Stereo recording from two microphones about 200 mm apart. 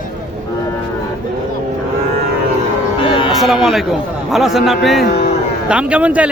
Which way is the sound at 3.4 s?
Centre (ahead or behind).